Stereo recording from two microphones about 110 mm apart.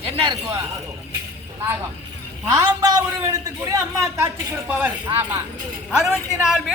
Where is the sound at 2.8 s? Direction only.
35° right (ahead or behind).